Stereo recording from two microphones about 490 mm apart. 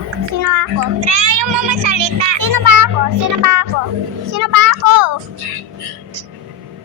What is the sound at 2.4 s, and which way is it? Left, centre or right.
Children playing, right.